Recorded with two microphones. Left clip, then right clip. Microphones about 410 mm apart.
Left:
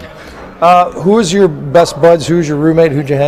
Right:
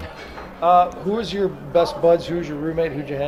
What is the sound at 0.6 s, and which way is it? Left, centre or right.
A man's voice, left.